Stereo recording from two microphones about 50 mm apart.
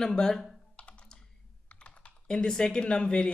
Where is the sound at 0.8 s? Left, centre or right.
Left.